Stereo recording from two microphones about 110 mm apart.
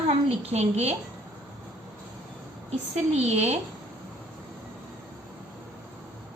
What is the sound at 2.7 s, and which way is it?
Speech, 75° right (ahead or behind).